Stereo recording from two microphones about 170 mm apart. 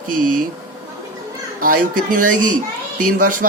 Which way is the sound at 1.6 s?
55° right (ahead or behind).